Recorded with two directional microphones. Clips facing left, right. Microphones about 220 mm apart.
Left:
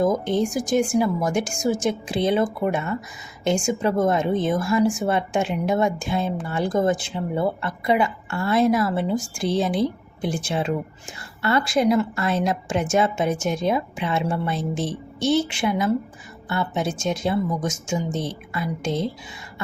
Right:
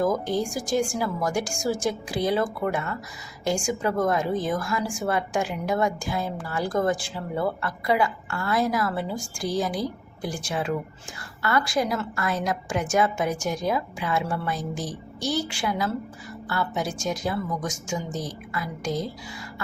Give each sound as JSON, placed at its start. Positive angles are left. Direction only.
{"t": 0.0, "sound": "a woman's voice", "side_deg": 20}